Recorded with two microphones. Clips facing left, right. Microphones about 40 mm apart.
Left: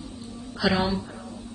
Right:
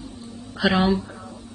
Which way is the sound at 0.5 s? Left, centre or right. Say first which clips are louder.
Right 4 dB; right.